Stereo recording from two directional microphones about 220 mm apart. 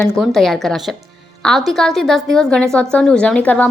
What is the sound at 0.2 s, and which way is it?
A woman's voice, centre (ahead or behind).